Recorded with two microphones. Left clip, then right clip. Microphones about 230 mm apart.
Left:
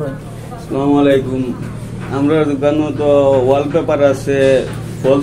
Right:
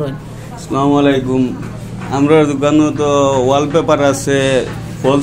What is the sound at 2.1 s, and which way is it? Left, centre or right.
A man's voice, right.